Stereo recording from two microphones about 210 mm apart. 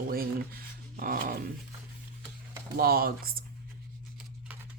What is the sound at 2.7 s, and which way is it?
Speech, 45° right (ahead or behind).